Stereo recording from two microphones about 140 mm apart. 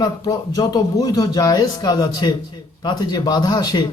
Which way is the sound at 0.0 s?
30° left (ahead or behind).